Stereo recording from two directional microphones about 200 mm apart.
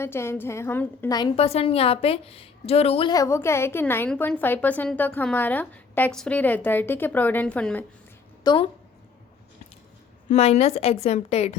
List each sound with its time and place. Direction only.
0.0 s a woman's voice: 10° left (ahead or behind)
1.4 s a woman's voice: 30° left (ahead or behind); by 7.9 s 5° left (ahead or behind)
8.4 s a woman's voice: 25° left (ahead or behind)
10.2 s a woman's voice: 35° left (ahead or behind)